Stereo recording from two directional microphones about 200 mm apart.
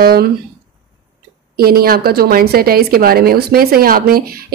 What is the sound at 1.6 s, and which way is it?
A woman's voice, 50° right (ahead or behind).